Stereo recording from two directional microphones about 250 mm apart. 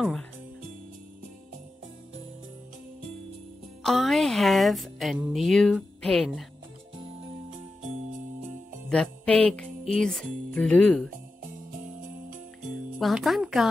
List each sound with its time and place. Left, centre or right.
0.0 s speech: centre
3.8 s speech: centre
8.8 s music: centre
11.8 s jingle bell: right
13.0 s speech: centre